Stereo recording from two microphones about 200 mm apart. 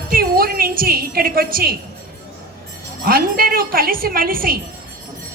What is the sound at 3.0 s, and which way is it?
A woman's voice, 50° right (ahead or behind).